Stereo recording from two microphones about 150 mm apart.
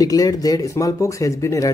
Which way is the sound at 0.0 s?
25° left (ahead or behind).